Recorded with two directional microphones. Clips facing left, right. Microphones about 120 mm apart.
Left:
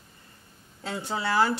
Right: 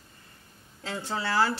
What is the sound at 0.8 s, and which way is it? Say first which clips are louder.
Speech: left 2 dB; 15° left (ahead or behind).